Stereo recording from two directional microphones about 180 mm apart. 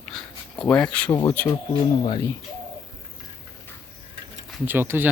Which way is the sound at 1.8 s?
25° left (ahead or behind).